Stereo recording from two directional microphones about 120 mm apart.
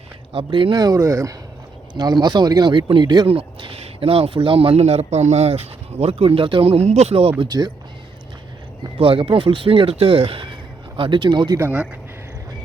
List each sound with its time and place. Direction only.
0.3 s speech: 45° right (ahead or behind)
0.8 s speech: 30° right (ahead or behind)
3.2 s speech: 50° right (ahead or behind)
7.3 s speech: 35° right (ahead or behind)
9.0 s speech: 50° right (ahead or behind)